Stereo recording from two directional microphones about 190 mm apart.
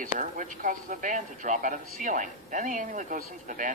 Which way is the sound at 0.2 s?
40° right (ahead or behind).